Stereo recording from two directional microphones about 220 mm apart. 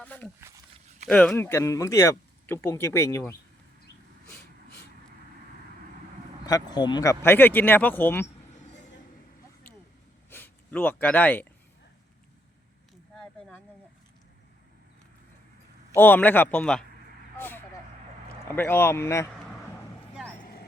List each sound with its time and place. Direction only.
0.0 s speech: 5° left (ahead or behind)
0.3 s speech: 10° right (ahead or behind)
1.0 s speech: 5° left (ahead or behind)
6.4 s speech: 15° left (ahead or behind)
10.2 s speech: 10° left (ahead or behind)
13.1 s a sound: 5° left (ahead or behind)
16.0 s speech: 10° left (ahead or behind)
17.3 s vehicle: 10° left (ahead or behind)
18.4 s speech: 10° left (ahead or behind)
20.4 s a sound: 45° left (ahead or behind)